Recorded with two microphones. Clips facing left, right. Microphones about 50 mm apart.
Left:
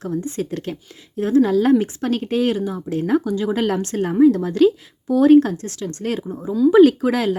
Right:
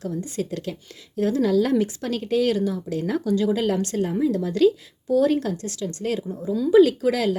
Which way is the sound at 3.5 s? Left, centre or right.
Left.